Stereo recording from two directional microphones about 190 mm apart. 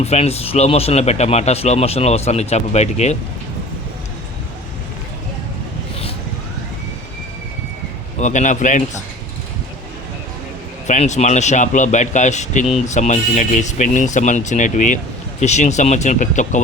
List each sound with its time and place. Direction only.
0.0 s speech: 35° left (ahead or behind)
8.2 s speech: 40° left (ahead or behind)
10.8 s speech: 40° left (ahead or behind)